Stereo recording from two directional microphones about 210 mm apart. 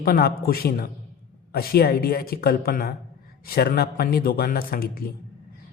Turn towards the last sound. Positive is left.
turn(degrees=45)  # may be behind; listen again after turning